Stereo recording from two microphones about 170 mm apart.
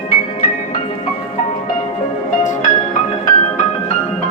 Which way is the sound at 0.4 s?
50° left (ahead or behind).